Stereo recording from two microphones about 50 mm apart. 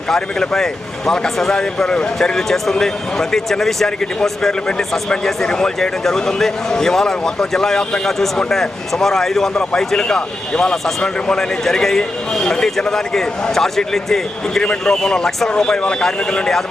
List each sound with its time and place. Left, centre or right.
0.1 s speech: centre